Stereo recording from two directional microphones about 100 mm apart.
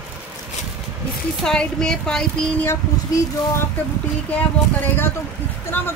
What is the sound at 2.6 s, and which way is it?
Speech, 25° left (ahead or behind).